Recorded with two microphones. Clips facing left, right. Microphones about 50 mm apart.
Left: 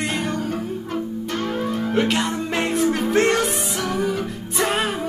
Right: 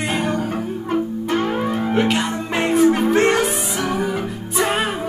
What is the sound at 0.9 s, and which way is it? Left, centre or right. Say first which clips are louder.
Music: right 8 dB; right.